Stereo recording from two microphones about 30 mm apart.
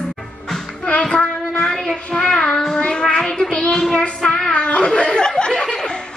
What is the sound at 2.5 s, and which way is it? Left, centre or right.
Child singing, centre.